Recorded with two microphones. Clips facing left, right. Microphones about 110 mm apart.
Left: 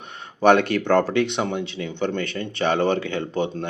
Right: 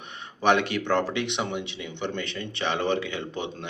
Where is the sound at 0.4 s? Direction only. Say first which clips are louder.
Left 6 dB; 45° left (ahead or behind).